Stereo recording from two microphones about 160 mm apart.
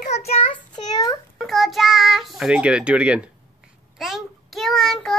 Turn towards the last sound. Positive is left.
turn(degrees=5)  # may be behind; listen again after turning